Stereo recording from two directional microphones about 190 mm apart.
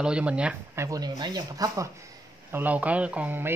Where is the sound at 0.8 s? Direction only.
20° right (ahead or behind).